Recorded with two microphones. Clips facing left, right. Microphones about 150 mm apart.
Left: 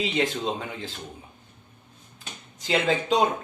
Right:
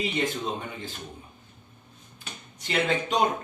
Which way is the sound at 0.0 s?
90° left.